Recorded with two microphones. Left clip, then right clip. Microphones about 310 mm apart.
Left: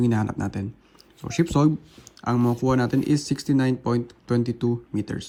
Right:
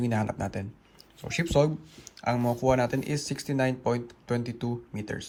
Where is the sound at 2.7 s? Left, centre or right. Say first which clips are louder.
Left 4 dB; centre.